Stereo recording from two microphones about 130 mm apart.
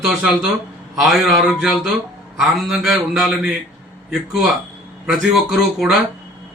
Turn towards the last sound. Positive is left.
turn(degrees=-5)  # may be behind; listen again after turning